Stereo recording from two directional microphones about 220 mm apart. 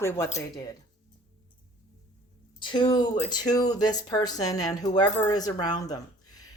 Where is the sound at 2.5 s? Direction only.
20° left (ahead or behind).